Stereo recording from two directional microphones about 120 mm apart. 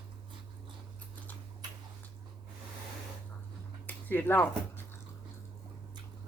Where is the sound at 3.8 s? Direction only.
15° left (ahead or behind).